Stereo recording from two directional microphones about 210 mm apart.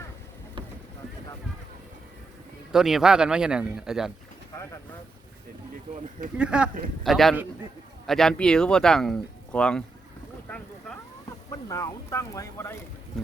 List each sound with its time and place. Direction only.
2.7 s speech: centre (ahead or behind)
6.3 s speech: 5° right (ahead or behind)
10.5 s boat: 5° left (ahead or behind)
11.7 s speech: 15° left (ahead or behind)